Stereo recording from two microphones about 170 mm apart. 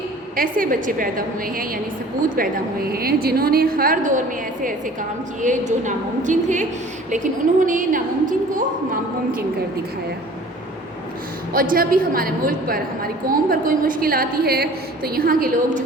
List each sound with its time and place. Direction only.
0.3 s a woman's voice: 55° right (ahead or behind)
5.4 s a woman's voice: 45° right (ahead or behind)
11.5 s a woman's voice: 55° right (ahead or behind)